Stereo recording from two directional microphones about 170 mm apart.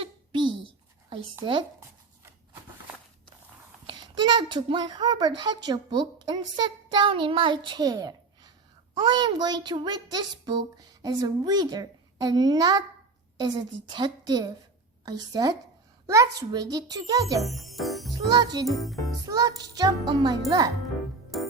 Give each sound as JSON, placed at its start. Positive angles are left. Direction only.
{"t": 0.0, "sound": "a sound", "side_deg": -25}
{"t": 1.4, "sound": "a child's voice", "side_deg": -25}
{"t": 3.8, "sound": "a child's voice", "side_deg": -25}
{"t": 13.9, "sound": "a child's voice", "side_deg": -25}
{"t": 17.4, "sound": "music", "side_deg": 0}
{"t": 18.3, "sound": "a child's voice", "side_deg": -25}
{"t": 18.7, "sound": "music", "side_deg": 0}
{"t": 19.3, "sound": "a child's voice", "side_deg": -20}
{"t": 21.3, "sound": "keyboard", "side_deg": 0}